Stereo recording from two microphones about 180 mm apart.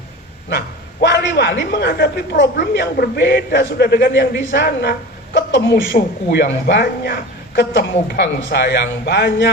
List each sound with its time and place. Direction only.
1.0 s a sound: 75° left (ahead or behind)
1.7 s speech: 65° left (ahead or behind)
5.7 s speech: 65° left (ahead or behind)